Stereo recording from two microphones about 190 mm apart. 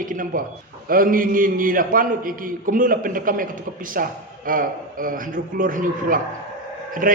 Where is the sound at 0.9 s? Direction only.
45° right (ahead or behind).